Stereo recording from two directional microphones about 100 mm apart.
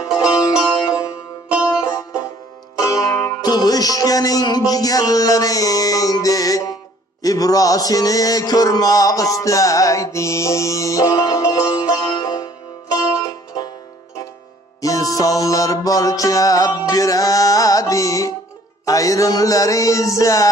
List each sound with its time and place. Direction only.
0.2 s music: 10° right (ahead or behind)
1.8 s music: 30° left (ahead or behind)
7.2 s mantra: 35° left (ahead or behind)
12.1 s music: 45° left (ahead or behind)
14.8 s mantra: 35° left (ahead or behind)